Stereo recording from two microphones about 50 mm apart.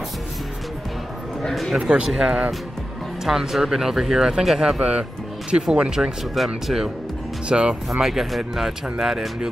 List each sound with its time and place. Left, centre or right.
1.5 s speech: centre
2.0 s speech: centre
6.3 s speech: centre
7.4 s speech: centre
7.9 s speech: centre